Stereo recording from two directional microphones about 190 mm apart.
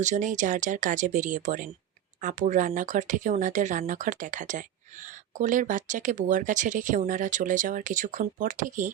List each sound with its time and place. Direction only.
0.0 s speech: 40° right (ahead or behind)